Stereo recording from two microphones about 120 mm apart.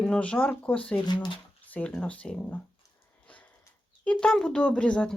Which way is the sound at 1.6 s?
10° left (ahead or behind).